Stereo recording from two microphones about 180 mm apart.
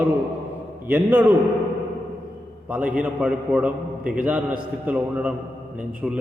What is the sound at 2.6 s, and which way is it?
A man's voice, 5° right (ahead or behind).